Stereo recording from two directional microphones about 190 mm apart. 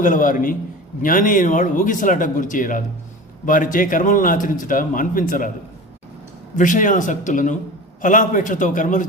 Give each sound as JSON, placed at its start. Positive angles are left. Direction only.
{"t": 0.0, "sound": "a man's voice", "side_deg": 45}
{"t": 6.6, "sound": "a man's voice", "side_deg": 45}